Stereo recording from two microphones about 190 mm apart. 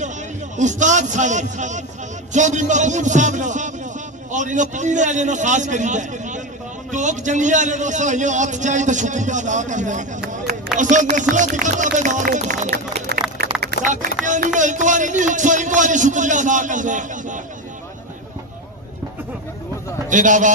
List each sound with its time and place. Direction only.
0.5 s a man's voice: 40° right (ahead or behind)
13.4 s a sound: 55° right (ahead or behind)
13.8 s a man's voice: 40° right (ahead or behind)
20.1 s a man's voice: 40° right (ahead or behind)